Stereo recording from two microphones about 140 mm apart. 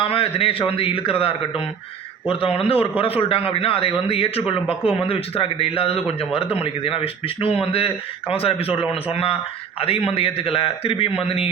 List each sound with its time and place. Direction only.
0.0 s a man's voice: 45° left (ahead or behind)